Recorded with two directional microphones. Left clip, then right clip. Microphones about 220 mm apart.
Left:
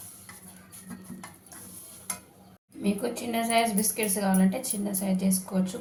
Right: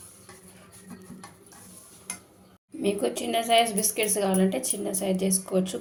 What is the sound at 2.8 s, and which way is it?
A woman's voice, 40° right (ahead or behind).